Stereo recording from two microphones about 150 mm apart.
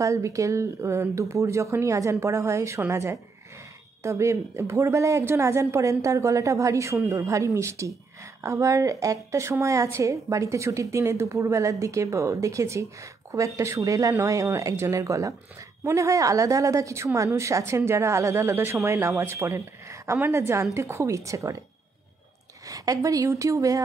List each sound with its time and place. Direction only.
0.0 s a woman's voice: 20° right (ahead or behind)
22.7 s a woman's voice: 25° right (ahead or behind)